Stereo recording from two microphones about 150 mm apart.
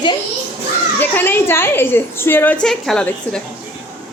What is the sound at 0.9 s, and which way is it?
A woman's voice, 15° left (ahead or behind).